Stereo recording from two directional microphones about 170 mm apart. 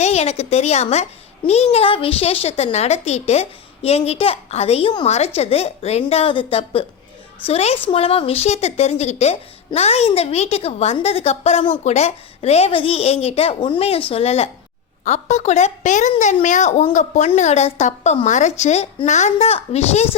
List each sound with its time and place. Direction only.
0.0 s a woman's voice: 40° left (ahead or behind)